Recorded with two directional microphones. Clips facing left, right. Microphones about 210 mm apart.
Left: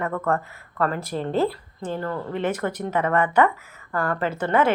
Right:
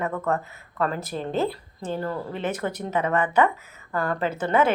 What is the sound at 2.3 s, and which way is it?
Speech, 25° right (ahead or behind).